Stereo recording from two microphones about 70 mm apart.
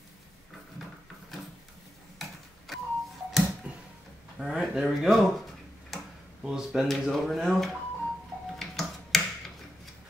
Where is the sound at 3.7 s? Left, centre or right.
Centre.